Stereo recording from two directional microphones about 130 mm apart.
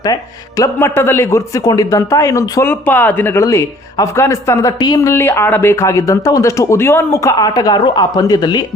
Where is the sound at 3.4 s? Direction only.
25° left (ahead or behind).